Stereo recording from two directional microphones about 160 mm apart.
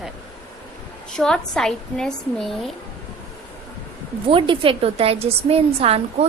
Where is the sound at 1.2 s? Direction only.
5° left (ahead or behind).